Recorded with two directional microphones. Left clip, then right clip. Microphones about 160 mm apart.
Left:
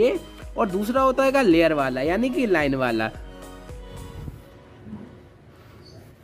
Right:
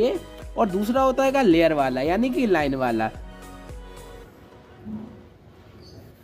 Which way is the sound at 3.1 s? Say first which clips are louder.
Left 1 dB; centre (ahead or behind).